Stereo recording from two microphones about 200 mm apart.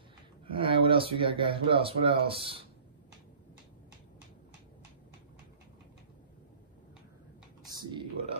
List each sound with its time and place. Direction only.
0.5 s speech: 25° right (ahead or behind)
7.6 s computer keyboard: 20° right (ahead or behind)